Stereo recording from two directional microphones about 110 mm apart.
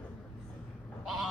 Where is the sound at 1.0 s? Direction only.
Centre (ahead or behind).